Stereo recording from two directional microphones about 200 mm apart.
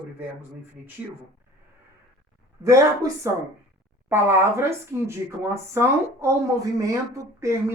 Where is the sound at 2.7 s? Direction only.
15° right (ahead or behind).